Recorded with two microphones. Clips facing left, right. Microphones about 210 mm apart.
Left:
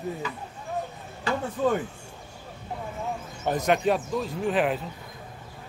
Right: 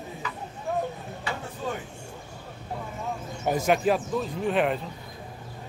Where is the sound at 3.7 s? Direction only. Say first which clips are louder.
Even; centre (ahead or behind).